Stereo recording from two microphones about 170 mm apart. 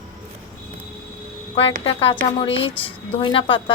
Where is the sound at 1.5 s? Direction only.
30° left (ahead or behind).